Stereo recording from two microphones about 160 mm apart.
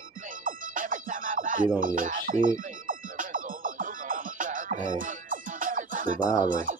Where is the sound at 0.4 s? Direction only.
60° right (ahead or behind).